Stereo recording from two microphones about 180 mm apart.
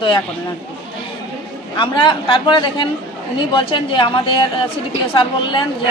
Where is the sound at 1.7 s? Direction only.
25° left (ahead or behind).